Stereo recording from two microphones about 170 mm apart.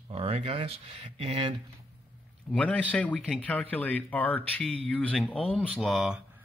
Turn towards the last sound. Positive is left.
turn(degrees=-5)  # may be behind; listen again after turning